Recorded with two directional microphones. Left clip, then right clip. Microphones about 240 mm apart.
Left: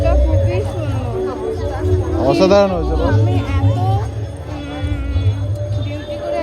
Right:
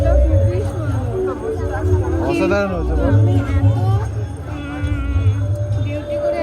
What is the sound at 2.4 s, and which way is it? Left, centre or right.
Speech, left.